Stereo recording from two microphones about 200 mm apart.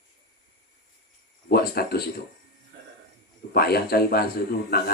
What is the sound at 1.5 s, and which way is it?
Speech, 50° left (ahead or behind).